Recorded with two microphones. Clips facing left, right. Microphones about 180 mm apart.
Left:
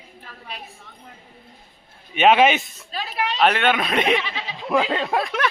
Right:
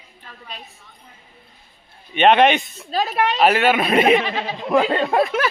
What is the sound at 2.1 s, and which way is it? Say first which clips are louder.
Speech: right 2 dB; 5° left (ahead or behind).